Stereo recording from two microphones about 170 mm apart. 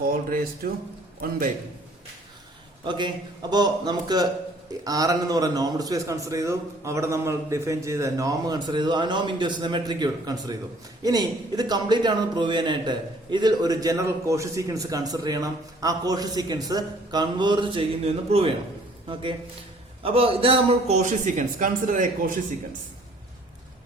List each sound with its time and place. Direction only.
0.0 s speech: 60° right (ahead or behind)
2.8 s a man's voice: 25° right (ahead or behind); by 22.1 s 50° right (ahead or behind)